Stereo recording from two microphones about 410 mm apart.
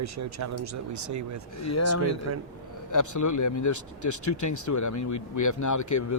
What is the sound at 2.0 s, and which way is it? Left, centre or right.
Speech, left.